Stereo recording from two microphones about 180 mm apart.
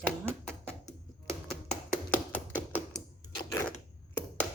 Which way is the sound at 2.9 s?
20° left (ahead or behind).